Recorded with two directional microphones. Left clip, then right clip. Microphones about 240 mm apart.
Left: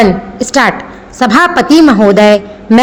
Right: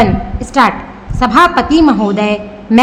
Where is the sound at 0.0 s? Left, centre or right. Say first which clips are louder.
Left 3 dB; left.